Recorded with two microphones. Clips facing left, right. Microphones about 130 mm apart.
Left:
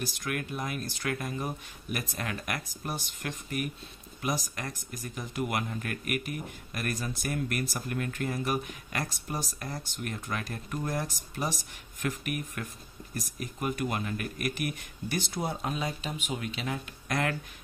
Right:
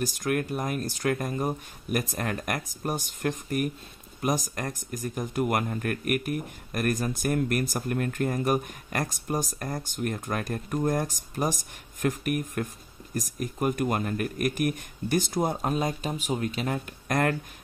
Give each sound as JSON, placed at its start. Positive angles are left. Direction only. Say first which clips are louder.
{"t": 0.0, "sound": "speech", "louder": "right 7 dB", "side_deg": -40}